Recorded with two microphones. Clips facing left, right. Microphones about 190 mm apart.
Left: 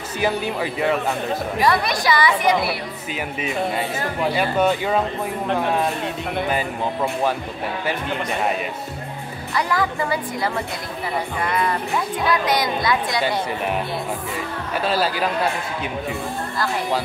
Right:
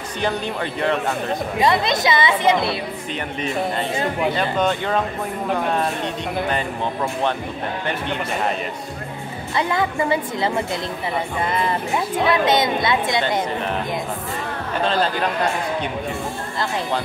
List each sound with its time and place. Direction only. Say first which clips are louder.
0.2 s speech: left 1 dB; 5° left (ahead or behind)
1.6 s a woman's voice: right 2 dB; 20° right (ahead or behind)
3.3 s speech: even; 5° left (ahead or behind)
3.9 s a woman's voice: right 2 dB; 20° right (ahead or behind)
4.3 s speech: left 5 dB; 10° left (ahead or behind)
9.6 s a woman's voice: right 1 dB; 25° right (ahead or behind)
14.8 s speech: right 1 dB; 5° left (ahead or behind)